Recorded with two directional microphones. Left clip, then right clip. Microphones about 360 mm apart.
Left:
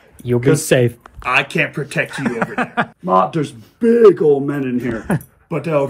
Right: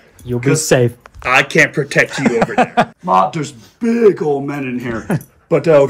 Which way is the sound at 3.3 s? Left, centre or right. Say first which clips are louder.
Left 2 dB; right.